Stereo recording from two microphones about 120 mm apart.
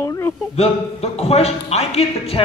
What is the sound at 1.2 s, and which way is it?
Speech, 60° left (ahead or behind).